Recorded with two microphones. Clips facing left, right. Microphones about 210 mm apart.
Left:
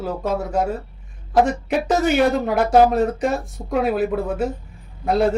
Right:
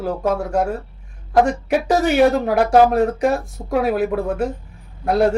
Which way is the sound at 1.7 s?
5° right (ahead or behind).